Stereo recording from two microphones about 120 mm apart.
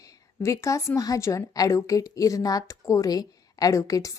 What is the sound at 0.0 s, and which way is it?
A woman's voice, 30° left (ahead or behind).